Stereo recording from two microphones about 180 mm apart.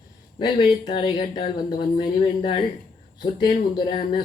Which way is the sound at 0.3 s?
25° left (ahead or behind).